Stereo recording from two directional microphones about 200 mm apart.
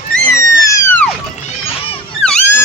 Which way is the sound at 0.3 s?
15° left (ahead or behind).